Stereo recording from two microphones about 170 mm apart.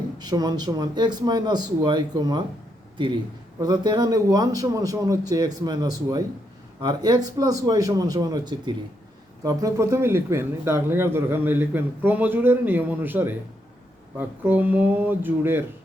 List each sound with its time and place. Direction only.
0.2 s speech: 25° right (ahead or behind)
3.6 s speech: 25° right (ahead or behind)